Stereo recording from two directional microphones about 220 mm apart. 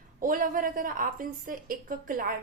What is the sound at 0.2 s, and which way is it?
A woman's voice, 40° right (ahead or behind).